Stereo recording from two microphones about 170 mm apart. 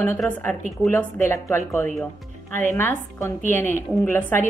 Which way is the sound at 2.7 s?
15° left (ahead or behind).